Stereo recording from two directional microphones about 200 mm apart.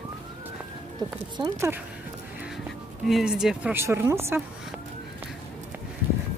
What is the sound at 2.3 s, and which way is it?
Speech, centre (ahead or behind).